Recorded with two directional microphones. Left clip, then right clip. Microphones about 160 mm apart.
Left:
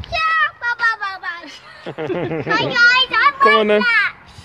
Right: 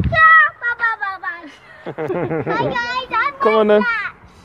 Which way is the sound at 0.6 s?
35° left (ahead or behind).